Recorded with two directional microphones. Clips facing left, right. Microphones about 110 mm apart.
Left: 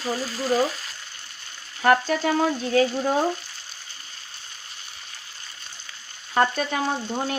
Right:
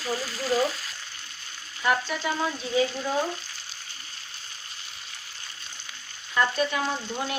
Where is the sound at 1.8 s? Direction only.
50° left (ahead or behind).